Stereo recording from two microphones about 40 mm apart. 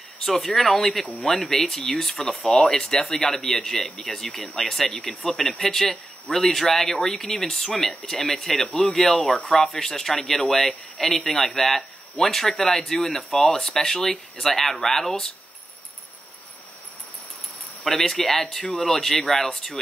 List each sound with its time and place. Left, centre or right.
0.2 s speech: centre
4.8 s speech: left
5.3 s speech: centre
9.1 s speech: left
9.5 s speech: centre
17.8 s speech: centre